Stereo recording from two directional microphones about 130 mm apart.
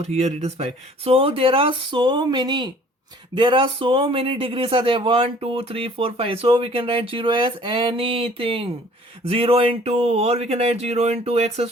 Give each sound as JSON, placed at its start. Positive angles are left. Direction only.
{"t": 0.0, "sound": "a man's voice", "side_deg": -55}